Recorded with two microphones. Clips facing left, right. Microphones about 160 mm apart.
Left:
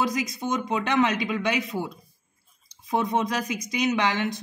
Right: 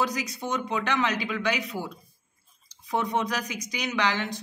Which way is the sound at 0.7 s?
20° left (ahead or behind).